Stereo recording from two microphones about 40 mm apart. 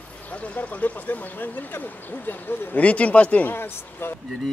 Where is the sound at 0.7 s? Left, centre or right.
Left.